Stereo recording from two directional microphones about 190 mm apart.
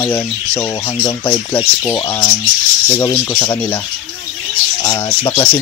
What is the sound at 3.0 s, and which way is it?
Speech, 15° left (ahead or behind).